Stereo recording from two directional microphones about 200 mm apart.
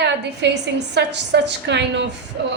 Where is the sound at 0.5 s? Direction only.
60° right (ahead or behind).